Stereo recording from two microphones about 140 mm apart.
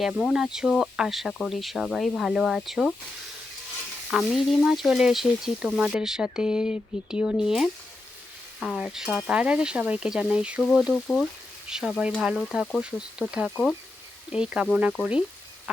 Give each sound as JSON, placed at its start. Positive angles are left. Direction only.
{"t": 0.0, "sound": "speech", "side_deg": -5}
{"t": 4.1, "sound": "speech", "side_deg": 0}
{"t": 8.6, "sound": "frying", "side_deg": -5}
{"t": 10.7, "sound": "speech", "side_deg": 0}
{"t": 14.3, "sound": "frying", "side_deg": -5}